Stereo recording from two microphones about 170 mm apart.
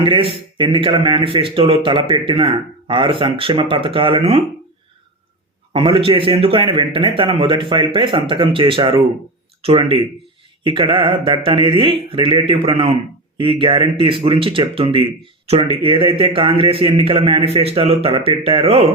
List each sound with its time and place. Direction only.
0.0 s speech: 30° right (ahead or behind)
5.7 s speech: 30° right (ahead or behind)